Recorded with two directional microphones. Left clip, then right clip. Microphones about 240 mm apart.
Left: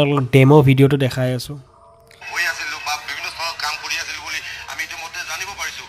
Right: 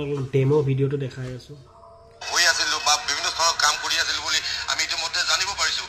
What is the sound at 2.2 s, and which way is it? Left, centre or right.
Music, right.